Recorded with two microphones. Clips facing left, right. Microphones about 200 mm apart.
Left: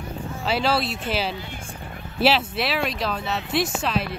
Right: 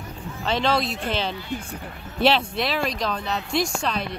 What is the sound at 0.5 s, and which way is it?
Speech, 5° left (ahead or behind).